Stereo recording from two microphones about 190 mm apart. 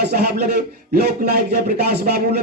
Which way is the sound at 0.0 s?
55° right (ahead or behind).